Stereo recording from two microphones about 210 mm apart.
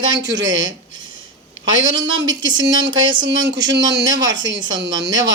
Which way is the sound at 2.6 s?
20° right (ahead or behind).